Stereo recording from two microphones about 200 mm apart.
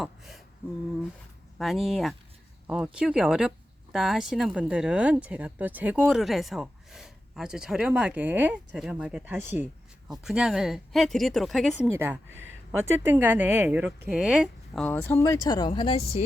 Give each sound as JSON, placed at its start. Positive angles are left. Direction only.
{"t": 0.0, "sound": "a sound", "side_deg": 0}
{"t": 1.5, "sound": "speech", "side_deg": 0}
{"t": 11.9, "sound": "speech", "side_deg": -10}
{"t": 12.3, "sound": "speech", "side_deg": -75}
{"t": 12.8, "sound": "speech", "side_deg": -10}